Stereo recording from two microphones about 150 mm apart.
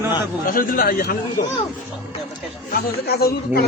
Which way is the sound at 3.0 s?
90° left.